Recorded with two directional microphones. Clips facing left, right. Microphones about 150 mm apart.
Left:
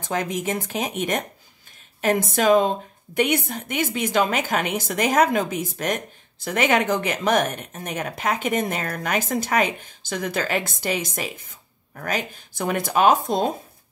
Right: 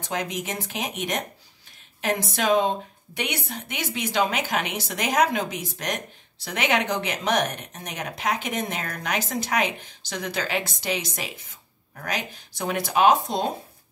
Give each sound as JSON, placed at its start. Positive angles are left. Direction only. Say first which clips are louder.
{"t": 0.0, "sound": "a woman's voice", "louder": "left 4 dB", "side_deg": 50}